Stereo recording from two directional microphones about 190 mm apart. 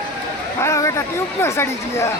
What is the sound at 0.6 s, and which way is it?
Speech, 15° left (ahead or behind).